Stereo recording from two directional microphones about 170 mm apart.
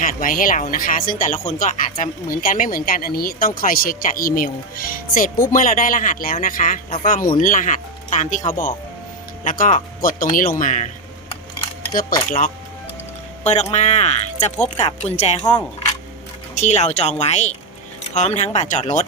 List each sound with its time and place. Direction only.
0.0 s speech: 50° left (ahead or behind)
11.9 s speech: 55° left (ahead or behind)
13.4 s speech: 40° left (ahead or behind)
15.4 s speech: 25° left (ahead or behind)
16.6 s speech: 40° left (ahead or behind)